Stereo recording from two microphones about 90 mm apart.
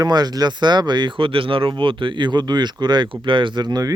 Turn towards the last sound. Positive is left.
turn(degrees=-50)  # may be behind; listen again after turning